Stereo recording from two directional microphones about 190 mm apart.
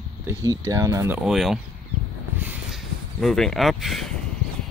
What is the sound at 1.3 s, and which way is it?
Speech, centre (ahead or behind).